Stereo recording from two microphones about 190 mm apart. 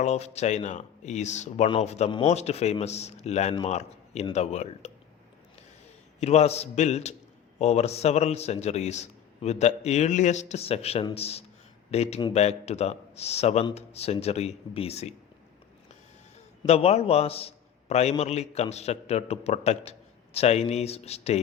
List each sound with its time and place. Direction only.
0.0 s a man's voice: 35° left (ahead or behind)
6.1 s a man's voice: 35° left (ahead or behind)
16.6 s a man's voice: 35° left (ahead or behind)